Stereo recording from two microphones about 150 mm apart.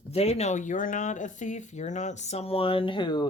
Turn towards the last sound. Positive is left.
turn(degrees=30)  # may be behind; listen again after turning